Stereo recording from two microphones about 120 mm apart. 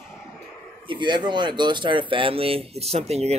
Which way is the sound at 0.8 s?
40° right (ahead or behind).